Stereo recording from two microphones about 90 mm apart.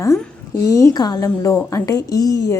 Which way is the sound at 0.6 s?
35° left (ahead or behind).